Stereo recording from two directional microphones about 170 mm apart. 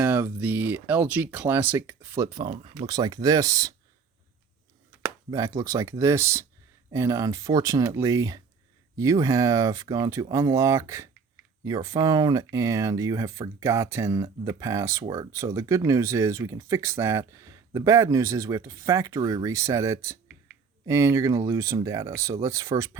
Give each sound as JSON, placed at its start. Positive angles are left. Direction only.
{"t": 0.0, "sound": "speech", "side_deg": -10}
{"t": 5.0, "sound": "speech", "side_deg": -20}